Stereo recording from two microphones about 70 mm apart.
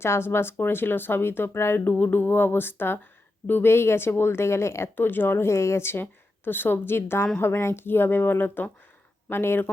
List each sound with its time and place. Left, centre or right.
0.0 s a woman's voice: left